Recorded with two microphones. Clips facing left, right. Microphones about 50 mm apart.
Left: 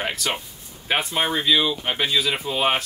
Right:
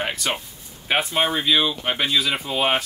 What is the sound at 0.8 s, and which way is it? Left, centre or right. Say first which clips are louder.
Speech: right 2 dB; centre.